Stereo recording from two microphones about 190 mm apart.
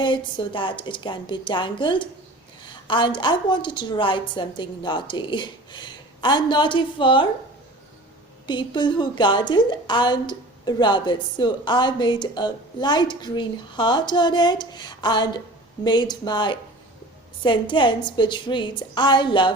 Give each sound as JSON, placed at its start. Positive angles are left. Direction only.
{"t": 0.0, "sound": "a woman's voice", "side_deg": 25}
{"t": 8.4, "sound": "a woman's voice", "side_deg": 25}